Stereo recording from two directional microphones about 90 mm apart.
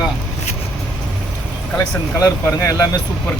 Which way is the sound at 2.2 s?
40° left (ahead or behind).